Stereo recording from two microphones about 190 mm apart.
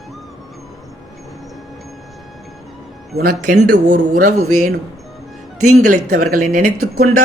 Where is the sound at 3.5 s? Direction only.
45° right (ahead or behind).